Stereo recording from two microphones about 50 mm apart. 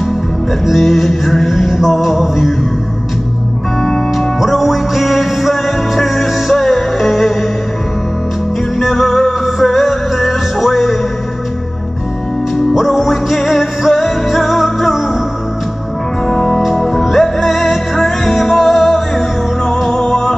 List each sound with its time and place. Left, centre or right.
0.7 s music: centre
3.8 s music: centre
8.7 s music: centre
12.7 s music: centre
16.3 s music: centre